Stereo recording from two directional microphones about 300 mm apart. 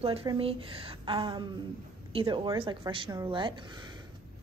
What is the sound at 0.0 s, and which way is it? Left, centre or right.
A woman's voice, centre.